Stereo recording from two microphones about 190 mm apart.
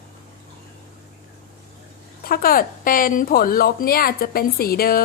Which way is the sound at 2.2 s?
50° left (ahead or behind).